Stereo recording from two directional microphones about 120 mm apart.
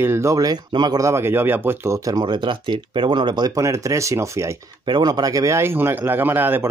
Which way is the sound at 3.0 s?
45° right (ahead or behind).